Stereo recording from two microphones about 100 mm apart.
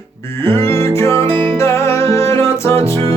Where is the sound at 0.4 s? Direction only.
25° left (ahead or behind).